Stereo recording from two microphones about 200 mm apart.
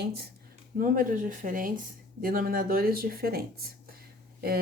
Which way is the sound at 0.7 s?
45° right (ahead or behind).